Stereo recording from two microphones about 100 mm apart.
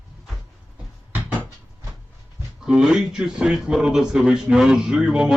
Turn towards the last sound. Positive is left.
turn(degrees=-10)  # may be behind; listen again after turning